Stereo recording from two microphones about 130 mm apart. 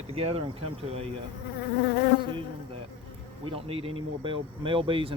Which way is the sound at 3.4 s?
45° right (ahead or behind).